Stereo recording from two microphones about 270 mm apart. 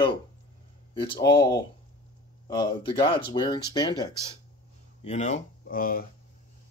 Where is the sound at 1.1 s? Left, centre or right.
Centre.